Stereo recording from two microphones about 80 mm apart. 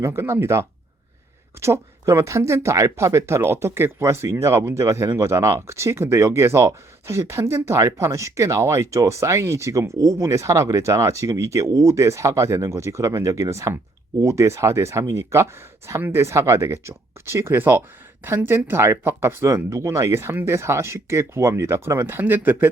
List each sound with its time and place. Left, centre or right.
0.0 s speech: right